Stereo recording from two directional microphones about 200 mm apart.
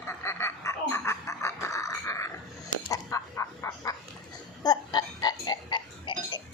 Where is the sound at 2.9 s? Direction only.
15° left (ahead or behind).